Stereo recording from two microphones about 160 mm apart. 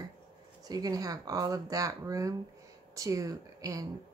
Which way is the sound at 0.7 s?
25° right (ahead or behind).